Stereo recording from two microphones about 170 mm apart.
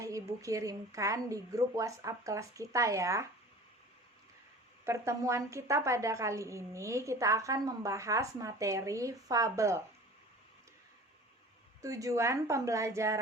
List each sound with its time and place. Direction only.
0.0 s a woman's voice: 20° right (ahead or behind)
4.9 s a woman's voice: 15° right (ahead or behind)
11.8 s a woman's voice: 20° right (ahead or behind)